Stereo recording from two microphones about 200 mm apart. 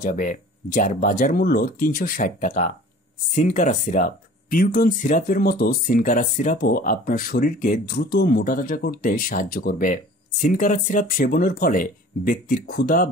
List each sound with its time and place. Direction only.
0.0 s speech: 45° left (ahead or behind)